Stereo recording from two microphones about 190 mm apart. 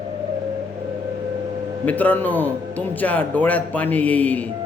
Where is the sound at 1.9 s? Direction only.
10° left (ahead or behind).